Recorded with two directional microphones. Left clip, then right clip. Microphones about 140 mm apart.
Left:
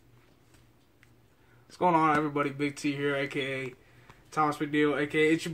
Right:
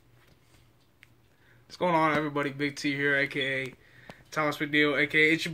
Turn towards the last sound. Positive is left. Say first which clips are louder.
# right 3 dB
turn(degrees=5)  # may be behind; listen again after turning